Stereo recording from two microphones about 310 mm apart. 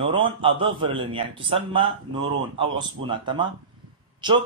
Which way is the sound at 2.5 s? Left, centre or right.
Centre.